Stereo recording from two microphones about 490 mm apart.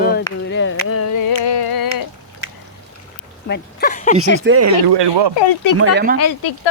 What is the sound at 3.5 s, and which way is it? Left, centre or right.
Speech, centre.